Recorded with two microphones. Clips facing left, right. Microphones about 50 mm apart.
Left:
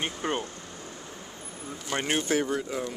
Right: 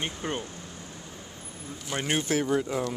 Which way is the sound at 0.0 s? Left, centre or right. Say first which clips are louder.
Left 2 dB; centre.